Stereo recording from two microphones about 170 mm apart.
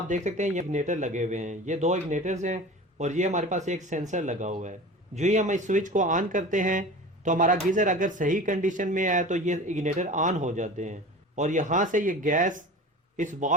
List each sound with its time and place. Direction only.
0.1 s speech: 45° right (ahead or behind)